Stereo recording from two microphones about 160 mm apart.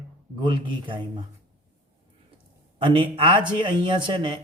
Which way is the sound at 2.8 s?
35° right (ahead or behind).